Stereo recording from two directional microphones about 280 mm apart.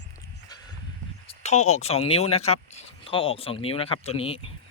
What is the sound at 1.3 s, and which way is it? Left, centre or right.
Speech, left.